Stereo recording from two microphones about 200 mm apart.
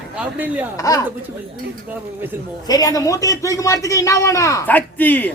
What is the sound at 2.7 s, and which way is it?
A man's voice, 20° left (ahead or behind).